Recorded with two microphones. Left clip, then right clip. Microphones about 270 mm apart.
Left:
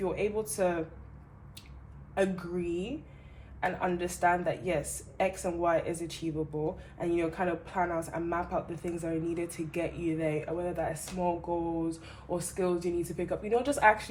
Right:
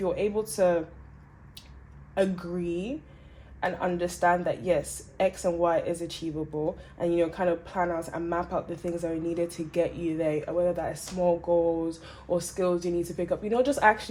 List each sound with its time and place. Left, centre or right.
0.0 s speech: right
2.1 s speech: right